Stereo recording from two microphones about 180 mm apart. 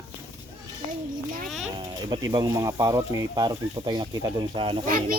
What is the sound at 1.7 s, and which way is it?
Speech, 20° right (ahead or behind).